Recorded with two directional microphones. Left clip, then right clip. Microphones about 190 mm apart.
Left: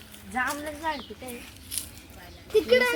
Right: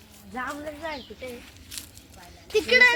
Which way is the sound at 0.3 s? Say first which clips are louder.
Left 4 dB; 60° left (ahead or behind).